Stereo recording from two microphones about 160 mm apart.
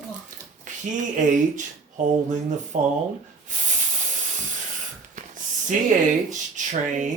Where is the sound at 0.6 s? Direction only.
50° right (ahead or behind).